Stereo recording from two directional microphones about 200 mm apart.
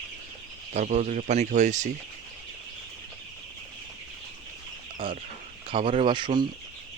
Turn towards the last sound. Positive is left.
turn(degrees=-25)  # may be behind; listen again after turning